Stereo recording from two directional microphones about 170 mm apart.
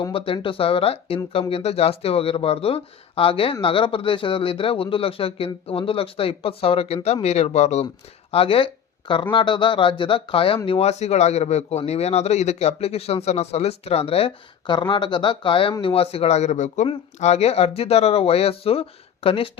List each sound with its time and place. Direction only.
0.1 s speech: 30° left (ahead or behind)